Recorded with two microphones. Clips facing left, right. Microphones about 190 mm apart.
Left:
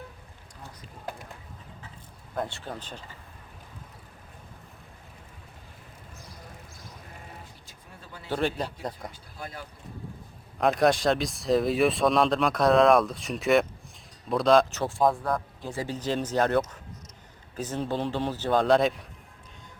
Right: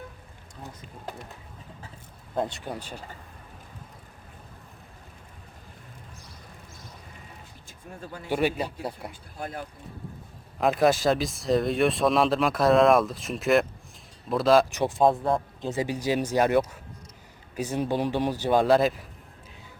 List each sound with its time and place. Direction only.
2.3 s speech: 20° right (ahead or behind)
8.0 s a man's voice: 45° right (ahead or behind)
8.3 s speech: 10° right (ahead or behind)
9.4 s a man's voice: 50° right (ahead or behind)
10.6 s speech: centre (ahead or behind)
14.7 s speech: 15° right (ahead or behind)